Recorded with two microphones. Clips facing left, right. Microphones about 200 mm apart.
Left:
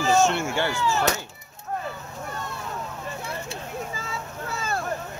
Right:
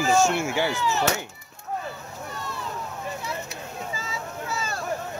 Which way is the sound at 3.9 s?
55° left (ahead or behind).